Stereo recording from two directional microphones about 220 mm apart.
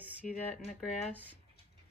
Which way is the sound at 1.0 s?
5° right (ahead or behind).